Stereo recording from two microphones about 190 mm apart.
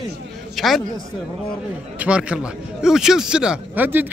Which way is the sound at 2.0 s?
5° right (ahead or behind).